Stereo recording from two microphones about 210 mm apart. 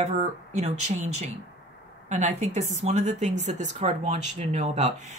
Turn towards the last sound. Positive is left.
turn(degrees=-35)  # may be behind; listen again after turning